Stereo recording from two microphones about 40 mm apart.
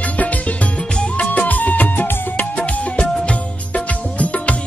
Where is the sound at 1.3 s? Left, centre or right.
Left.